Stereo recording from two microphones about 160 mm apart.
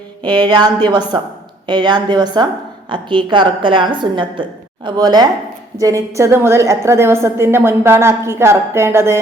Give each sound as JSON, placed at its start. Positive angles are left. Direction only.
{"t": 0.3, "sound": "a woman's voice", "side_deg": -30}